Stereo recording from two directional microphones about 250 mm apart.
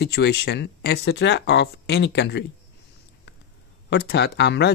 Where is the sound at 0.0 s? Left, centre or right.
Left.